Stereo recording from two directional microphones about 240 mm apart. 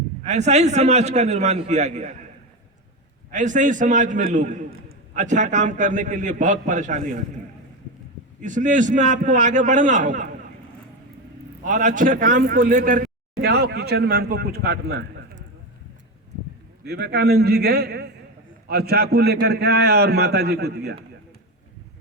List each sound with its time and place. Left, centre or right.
0.3 s a man's voice: right
3.3 s a man's voice: right
8.4 s a man's voice: right
11.6 s a man's voice: right
16.8 s a man's voice: right